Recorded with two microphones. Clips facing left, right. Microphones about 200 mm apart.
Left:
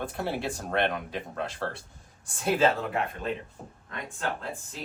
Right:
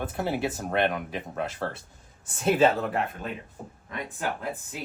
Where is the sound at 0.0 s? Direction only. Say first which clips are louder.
Right 3 dB; 20° right (ahead or behind).